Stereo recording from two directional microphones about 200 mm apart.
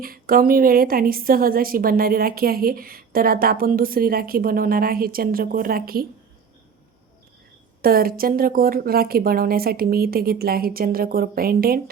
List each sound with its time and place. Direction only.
0.0 s a woman's voice: 45° right (ahead or behind)
7.8 s a woman's voice: 45° right (ahead or behind)